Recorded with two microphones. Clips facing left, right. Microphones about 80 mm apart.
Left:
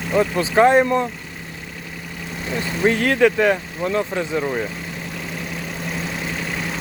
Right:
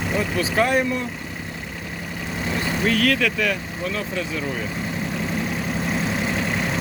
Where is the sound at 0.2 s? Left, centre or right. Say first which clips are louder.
Left 7 dB; left.